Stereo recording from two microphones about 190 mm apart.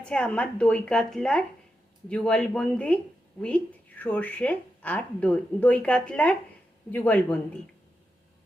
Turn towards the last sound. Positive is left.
turn(degrees=5)  # may be behind; listen again after turning